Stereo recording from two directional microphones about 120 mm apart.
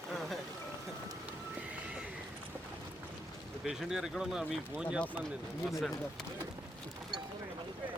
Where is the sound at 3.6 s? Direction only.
5° right (ahead or behind).